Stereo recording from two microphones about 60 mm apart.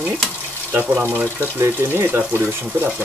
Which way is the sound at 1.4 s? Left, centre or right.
Right.